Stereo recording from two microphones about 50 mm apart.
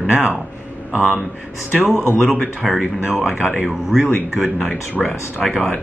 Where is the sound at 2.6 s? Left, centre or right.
Centre.